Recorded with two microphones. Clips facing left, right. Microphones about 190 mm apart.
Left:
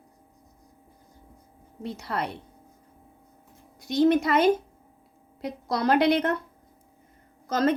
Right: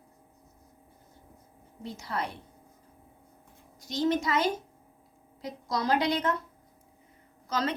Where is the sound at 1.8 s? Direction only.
65° left (ahead or behind).